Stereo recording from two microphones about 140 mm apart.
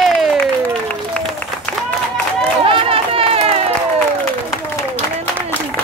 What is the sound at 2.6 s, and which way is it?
Run, 40° right (ahead or behind).